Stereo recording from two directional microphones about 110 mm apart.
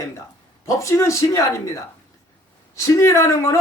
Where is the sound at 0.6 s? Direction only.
30° left (ahead or behind).